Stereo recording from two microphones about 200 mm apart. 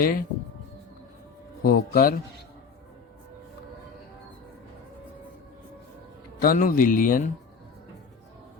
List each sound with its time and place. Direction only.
0.0 s speech: 45° left (ahead or behind)
1.6 s speech: 45° left (ahead or behind)
6.4 s speech: 45° left (ahead or behind)